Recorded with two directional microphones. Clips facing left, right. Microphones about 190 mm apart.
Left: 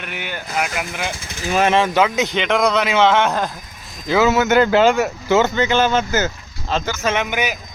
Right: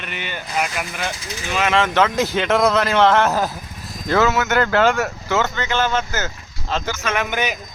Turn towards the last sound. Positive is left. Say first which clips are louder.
# left 2 dB
turn(degrees=10)  # may be behind; listen again after turning